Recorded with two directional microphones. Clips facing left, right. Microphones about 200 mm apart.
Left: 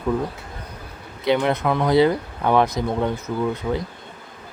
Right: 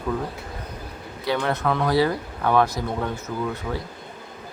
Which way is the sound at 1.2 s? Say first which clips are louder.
Left 4 dB; 20° left (ahead or behind).